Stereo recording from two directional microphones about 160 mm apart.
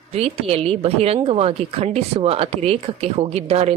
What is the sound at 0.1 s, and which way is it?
Speech, 40° right (ahead or behind).